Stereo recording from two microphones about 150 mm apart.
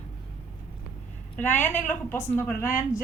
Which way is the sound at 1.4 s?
15° left (ahead or behind).